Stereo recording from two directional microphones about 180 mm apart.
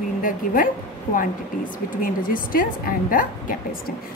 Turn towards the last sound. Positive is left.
turn(degrees=50)  # may be behind; listen again after turning